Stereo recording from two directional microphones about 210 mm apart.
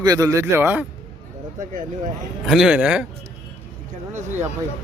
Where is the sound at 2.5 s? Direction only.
Centre (ahead or behind).